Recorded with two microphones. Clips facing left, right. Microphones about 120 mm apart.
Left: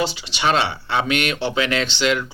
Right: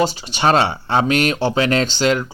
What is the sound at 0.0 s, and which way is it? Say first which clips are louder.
A man's voice: right 4 dB; 40° right (ahead or behind).